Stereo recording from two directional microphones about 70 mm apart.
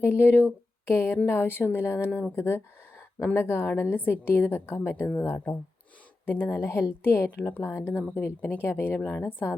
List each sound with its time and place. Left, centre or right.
0.0 s a woman's voice: left